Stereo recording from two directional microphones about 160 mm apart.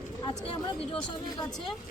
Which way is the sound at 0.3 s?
35° left (ahead or behind).